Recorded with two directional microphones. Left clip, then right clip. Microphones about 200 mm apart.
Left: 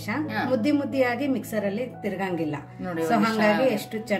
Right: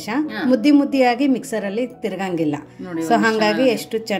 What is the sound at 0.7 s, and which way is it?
A woman's voice, 40° right (ahead or behind).